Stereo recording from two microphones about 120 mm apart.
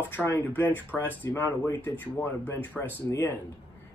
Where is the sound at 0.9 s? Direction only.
5° left (ahead or behind).